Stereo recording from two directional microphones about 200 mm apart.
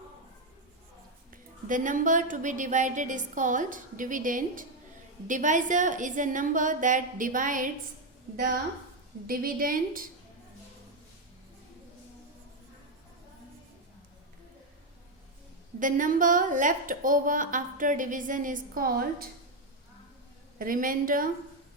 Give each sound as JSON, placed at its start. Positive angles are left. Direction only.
{"t": 1.3, "sound": "a woman's voice", "side_deg": -40}
{"t": 9.2, "sound": "a woman's voice", "side_deg": -45}
{"t": 15.8, "sound": "a woman's voice", "side_deg": -40}
{"t": 20.6, "sound": "a woman's voice", "side_deg": -45}